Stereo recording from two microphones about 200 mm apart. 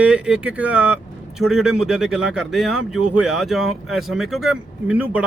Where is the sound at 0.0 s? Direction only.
5° right (ahead or behind).